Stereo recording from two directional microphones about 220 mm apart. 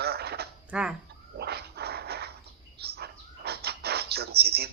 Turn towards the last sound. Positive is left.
turn(degrees=-45)  # may be behind; listen again after turning